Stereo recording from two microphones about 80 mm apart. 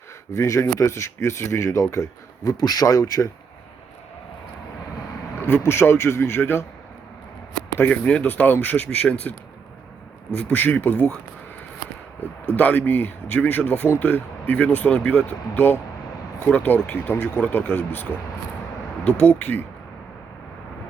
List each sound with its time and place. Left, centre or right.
0.3 s speech: left
5.4 s speech: left
7.9 s speech: centre
10.3 s speech: left
12.5 s speech: left